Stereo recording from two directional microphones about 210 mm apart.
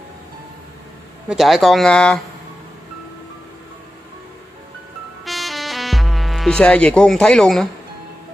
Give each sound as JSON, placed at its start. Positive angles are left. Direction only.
{"t": 1.3, "sound": "speech", "side_deg": 0}
{"t": 5.2, "sound": "music", "side_deg": 0}